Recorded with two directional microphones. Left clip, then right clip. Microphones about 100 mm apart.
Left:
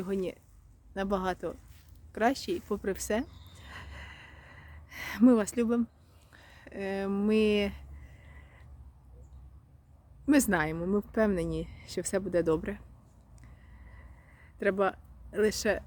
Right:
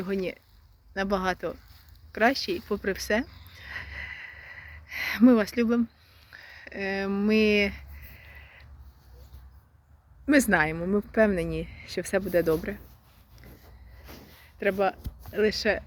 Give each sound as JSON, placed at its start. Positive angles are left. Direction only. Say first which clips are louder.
{"t": 0.0, "sound": "speech", "louder": "right 3 dB", "side_deg": 35}
{"t": 0.9, "sound": "speech", "louder": "right 4 dB", "side_deg": 45}
{"t": 2.1, "sound": "a sound", "louder": "right 5 dB", "side_deg": 35}
{"t": 10.2, "sound": "a woman's voice", "louder": "right 5 dB", "side_deg": 35}
{"t": 14.6, "sound": "speech", "louder": "right 3 dB", "side_deg": 70}
{"t": 15.3, "sound": "speech", "louder": "right 3 dB", "side_deg": 45}